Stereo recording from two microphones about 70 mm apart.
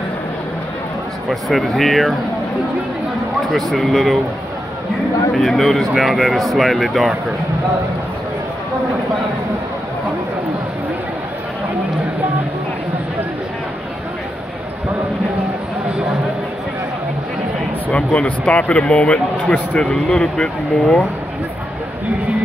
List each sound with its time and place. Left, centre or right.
1.3 s speech: centre
3.7 s speech: centre
5.4 s speech: centre
17.9 s speech: centre
19.9 s speech: centre